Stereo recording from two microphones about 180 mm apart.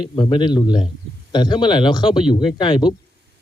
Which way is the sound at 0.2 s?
25° left (ahead or behind).